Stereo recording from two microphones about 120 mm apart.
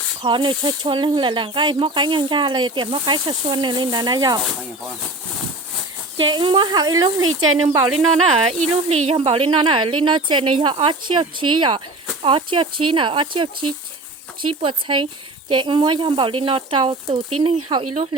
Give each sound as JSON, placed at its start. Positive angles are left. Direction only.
{"t": 0.2, "sound": "speech", "side_deg": -45}
{"t": 6.1, "sound": "speech", "side_deg": -40}
{"t": 8.3, "sound": "speech", "side_deg": -60}
{"t": 14.6, "sound": "speech", "side_deg": -45}
{"t": 17.1, "sound": "speech", "side_deg": -60}